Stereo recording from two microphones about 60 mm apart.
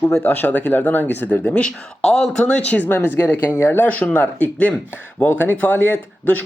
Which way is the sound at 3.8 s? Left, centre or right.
Left.